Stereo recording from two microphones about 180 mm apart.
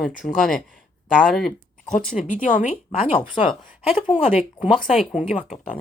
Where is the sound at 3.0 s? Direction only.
35° left (ahead or behind).